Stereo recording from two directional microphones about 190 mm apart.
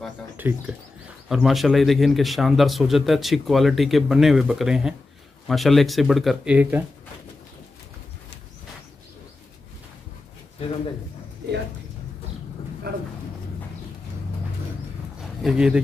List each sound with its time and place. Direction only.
0.4 s a man's voice: 10° right (ahead or behind)
12.9 s speech: 50° right (ahead or behind)
15.4 s a man's voice: 5° right (ahead or behind)